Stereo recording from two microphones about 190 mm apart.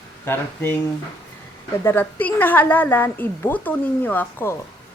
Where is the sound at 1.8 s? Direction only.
10° left (ahead or behind).